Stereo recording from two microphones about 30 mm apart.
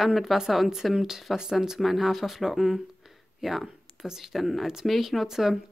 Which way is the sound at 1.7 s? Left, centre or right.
Centre.